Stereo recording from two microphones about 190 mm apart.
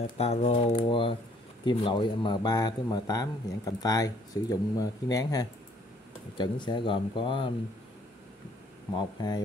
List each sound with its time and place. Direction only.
0.2 s speech: 30° left (ahead or behind)
8.9 s speech: 20° left (ahead or behind)